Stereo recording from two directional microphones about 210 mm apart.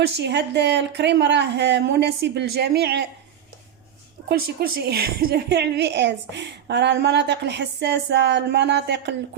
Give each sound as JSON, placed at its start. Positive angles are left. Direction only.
{"t": 0.0, "sound": "a woman's voice", "side_deg": -55}
{"t": 4.3, "sound": "a woman's voice", "side_deg": -45}